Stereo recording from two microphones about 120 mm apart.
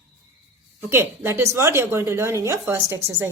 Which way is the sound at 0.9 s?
20° right (ahead or behind).